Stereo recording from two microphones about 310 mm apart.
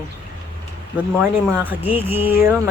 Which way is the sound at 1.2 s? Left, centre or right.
Centre.